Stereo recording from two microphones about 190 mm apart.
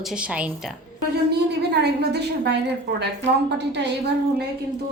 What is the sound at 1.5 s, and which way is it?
A woman's voice, 60° right (ahead or behind).